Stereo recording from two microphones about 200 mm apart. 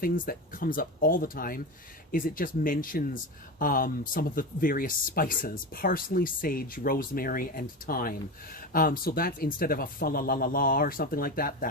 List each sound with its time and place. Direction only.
0.0 s speech: 45° left (ahead or behind)